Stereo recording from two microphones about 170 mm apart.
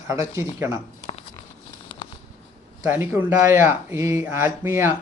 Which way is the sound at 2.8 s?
15° right (ahead or behind).